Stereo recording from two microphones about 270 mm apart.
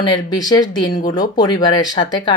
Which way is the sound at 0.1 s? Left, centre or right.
Centre.